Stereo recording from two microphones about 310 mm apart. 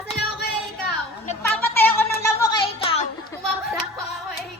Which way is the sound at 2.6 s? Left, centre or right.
Centre.